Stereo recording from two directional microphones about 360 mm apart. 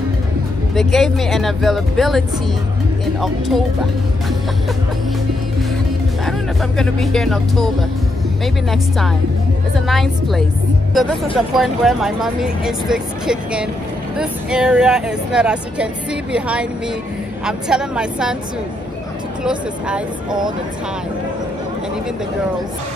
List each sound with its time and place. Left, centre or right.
0.7 s speech: centre
6.2 s speech: centre
8.6 s speech: centre
19.4 s speech: centre